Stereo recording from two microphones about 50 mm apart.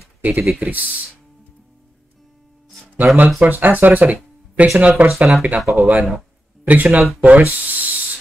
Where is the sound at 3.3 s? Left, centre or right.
Right.